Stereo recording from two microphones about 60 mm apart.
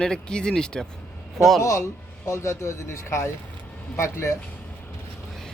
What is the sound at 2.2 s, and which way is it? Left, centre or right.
Speech, left.